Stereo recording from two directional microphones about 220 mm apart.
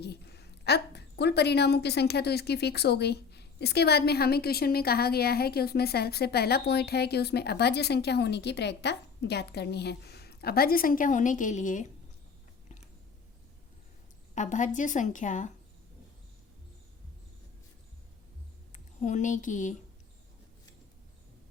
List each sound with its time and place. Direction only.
0.0 s a woman's voice: 50° left (ahead or behind)
14.3 s a woman's voice: 35° left (ahead or behind)
18.7 s a woman's voice: 35° left (ahead or behind)